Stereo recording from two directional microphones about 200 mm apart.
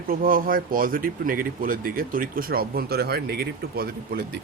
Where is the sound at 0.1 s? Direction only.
45° right (ahead or behind).